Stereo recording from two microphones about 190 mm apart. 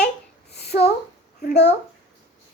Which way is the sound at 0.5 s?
60° left (ahead or behind).